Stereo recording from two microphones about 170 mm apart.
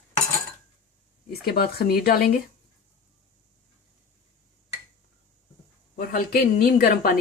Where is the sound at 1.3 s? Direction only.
65° left (ahead or behind).